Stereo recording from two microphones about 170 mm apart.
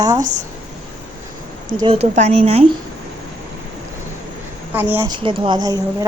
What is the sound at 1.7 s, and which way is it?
Speech, 30° right (ahead or behind).